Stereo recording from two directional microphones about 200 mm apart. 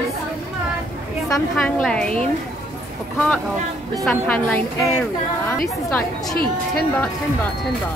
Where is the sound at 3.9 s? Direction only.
5° left (ahead or behind).